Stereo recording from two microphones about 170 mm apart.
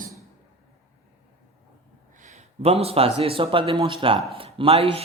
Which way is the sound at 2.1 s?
45° right (ahead or behind).